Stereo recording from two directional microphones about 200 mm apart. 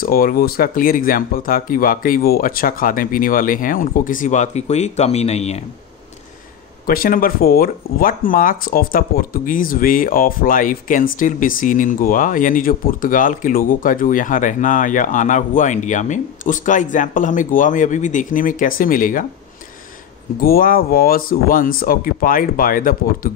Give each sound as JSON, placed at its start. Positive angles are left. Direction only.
{"t": 0.0, "sound": "speech", "side_deg": 45}
{"t": 6.9, "sound": "speech", "side_deg": 45}
{"t": 20.3, "sound": "speech", "side_deg": 45}